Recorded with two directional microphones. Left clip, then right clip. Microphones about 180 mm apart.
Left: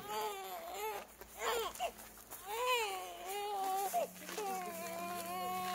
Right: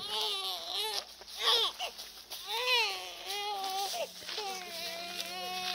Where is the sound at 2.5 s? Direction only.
60° left (ahead or behind).